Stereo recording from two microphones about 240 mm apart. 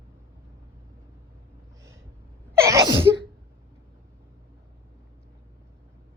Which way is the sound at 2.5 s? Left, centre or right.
Centre.